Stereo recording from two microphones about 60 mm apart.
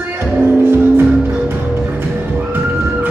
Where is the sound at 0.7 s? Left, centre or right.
Right.